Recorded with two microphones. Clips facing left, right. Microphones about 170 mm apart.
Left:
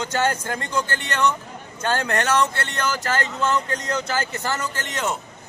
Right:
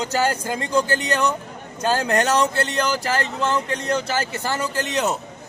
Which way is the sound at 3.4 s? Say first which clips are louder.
Even; 30° right (ahead or behind).